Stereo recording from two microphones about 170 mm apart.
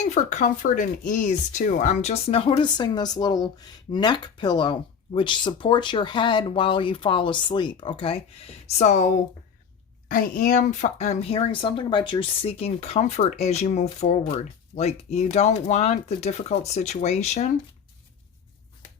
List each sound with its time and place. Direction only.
0.0 s speech: 45° left (ahead or behind)
10.1 s speech: 55° left (ahead or behind)